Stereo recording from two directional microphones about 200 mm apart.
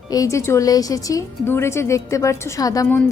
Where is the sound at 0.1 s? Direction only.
15° left (ahead or behind).